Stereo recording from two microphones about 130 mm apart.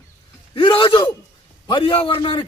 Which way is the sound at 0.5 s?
40° left (ahead or behind).